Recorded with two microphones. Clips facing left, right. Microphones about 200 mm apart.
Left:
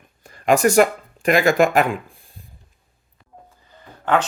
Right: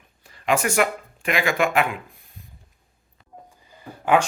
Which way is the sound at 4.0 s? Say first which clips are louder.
Right 1 dB; 10° right (ahead or behind).